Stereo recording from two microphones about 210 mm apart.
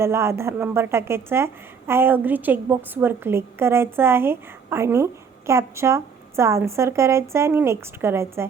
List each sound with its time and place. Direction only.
0.0 s a woman's voice: 10° right (ahead or behind)